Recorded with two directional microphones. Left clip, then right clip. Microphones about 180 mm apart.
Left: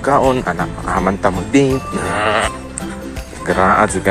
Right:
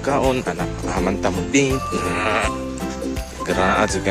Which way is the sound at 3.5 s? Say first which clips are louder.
Left 6 dB; 25° right (ahead or behind).